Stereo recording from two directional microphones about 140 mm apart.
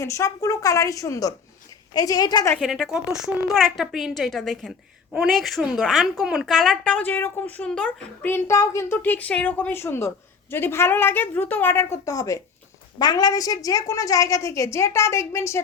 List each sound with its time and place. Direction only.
0.0 s a woman's voice: 20° left (ahead or behind)
2.6 s a woman's voice: 5° right (ahead or behind); by 15.6 s 20° left (ahead or behind)